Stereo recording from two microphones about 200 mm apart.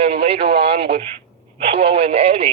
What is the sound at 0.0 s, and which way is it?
Radio, 30° right (ahead or behind).